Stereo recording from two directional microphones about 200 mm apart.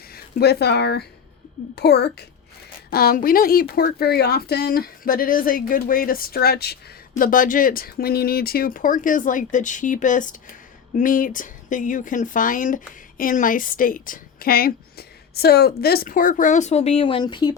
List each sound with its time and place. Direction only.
0.1 s a woman's voice: 50° left (ahead or behind); by 17.5 s 20° left (ahead or behind)